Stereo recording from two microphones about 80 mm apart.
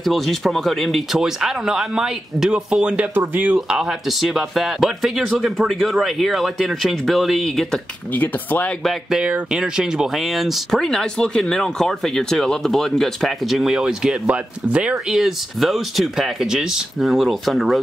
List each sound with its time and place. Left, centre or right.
0.0 s speech: centre
3.5 s speech: centre
8.1 s speech: left
9.1 s speech: centre